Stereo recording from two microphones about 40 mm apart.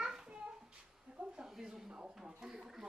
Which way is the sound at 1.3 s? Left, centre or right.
Centre.